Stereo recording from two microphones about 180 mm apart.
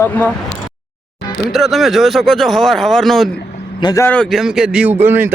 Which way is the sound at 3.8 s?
15° left (ahead or behind).